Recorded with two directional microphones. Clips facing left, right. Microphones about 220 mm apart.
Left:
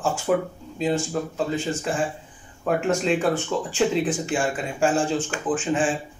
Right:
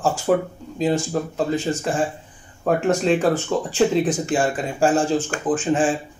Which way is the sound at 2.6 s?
40° right (ahead or behind).